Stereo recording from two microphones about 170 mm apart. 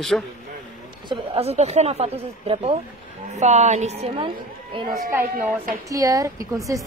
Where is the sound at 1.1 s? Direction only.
40° right (ahead or behind).